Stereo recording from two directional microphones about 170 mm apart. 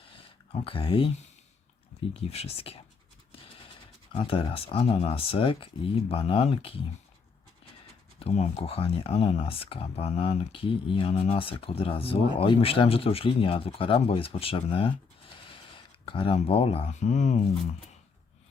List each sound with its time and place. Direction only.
0.1 s a sound: 35° left (ahead or behind)
2.3 s speech: 35° left (ahead or behind)
4.1 s speech: 35° left (ahead or behind)
8.2 s speech: 35° left (ahead or behind)